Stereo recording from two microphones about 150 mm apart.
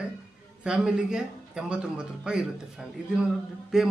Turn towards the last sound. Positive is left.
turn(degrees=-5)  # may be behind; listen again after turning